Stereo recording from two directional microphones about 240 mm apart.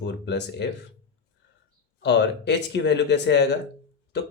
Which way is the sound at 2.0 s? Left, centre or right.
Left.